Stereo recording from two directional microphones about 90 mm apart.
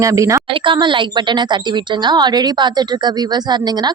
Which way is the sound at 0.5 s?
65° right (ahead or behind).